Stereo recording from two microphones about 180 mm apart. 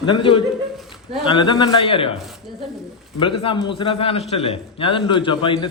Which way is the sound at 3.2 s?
30° left (ahead or behind).